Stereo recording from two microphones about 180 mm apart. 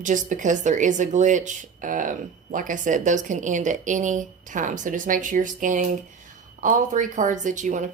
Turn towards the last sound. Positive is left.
turn(degrees=-45)  # may be behind; listen again after turning